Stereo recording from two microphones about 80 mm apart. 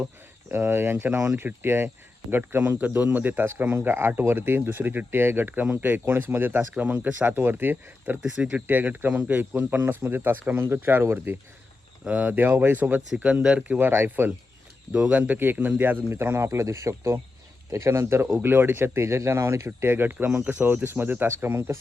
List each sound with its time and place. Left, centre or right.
0.0 s speech: right
12.0 s speech: centre
13.7 s speech: right
14.9 s speech: centre